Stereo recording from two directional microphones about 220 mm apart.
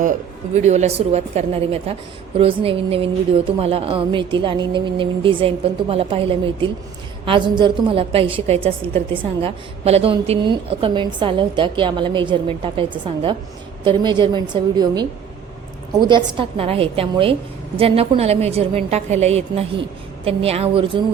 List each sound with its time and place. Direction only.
0.5 s a woman's voice: 30° right (ahead or behind)